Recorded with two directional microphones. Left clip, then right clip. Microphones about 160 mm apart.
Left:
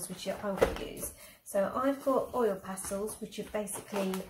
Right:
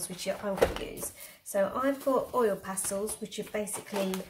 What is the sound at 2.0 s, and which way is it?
Speech, 20° right (ahead or behind).